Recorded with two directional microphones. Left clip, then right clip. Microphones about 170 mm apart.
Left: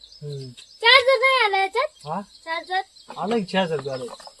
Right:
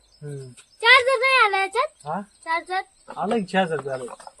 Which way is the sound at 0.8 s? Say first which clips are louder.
Left 1 dB; 30° right (ahead or behind).